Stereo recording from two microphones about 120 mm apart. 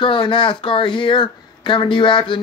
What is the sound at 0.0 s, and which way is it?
Speech, 45° left (ahead or behind).